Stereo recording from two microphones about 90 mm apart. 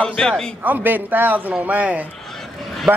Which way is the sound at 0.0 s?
10° left (ahead or behind).